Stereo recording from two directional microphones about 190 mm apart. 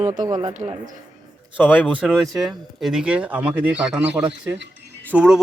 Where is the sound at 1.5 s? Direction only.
10° left (ahead or behind).